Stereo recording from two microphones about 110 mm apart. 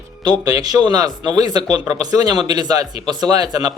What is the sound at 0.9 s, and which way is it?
A man's voice, 40° right (ahead or behind).